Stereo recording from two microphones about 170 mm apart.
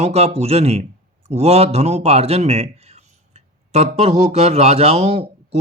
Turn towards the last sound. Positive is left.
turn(degrees=-40)  # may be behind; listen again after turning